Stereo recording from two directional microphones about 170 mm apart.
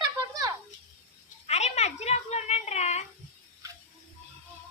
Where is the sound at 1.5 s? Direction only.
40° left (ahead or behind).